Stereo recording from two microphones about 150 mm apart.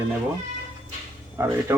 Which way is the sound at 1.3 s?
15° right (ahead or behind).